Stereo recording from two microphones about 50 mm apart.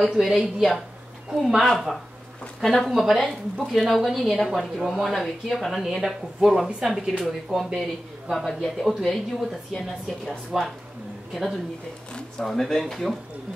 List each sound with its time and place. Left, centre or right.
0.1 s speech: centre
2.6 s a woman's voice: centre
3.0 s a woman's voice: centre
10.5 s speech: centre
12.1 s a sound: centre
12.4 s speech: centre